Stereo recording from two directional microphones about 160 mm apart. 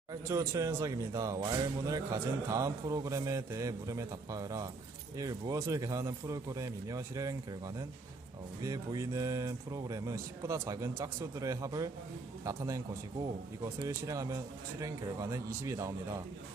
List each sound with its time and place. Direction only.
0.1 s a man's voice: 20° right (ahead or behind)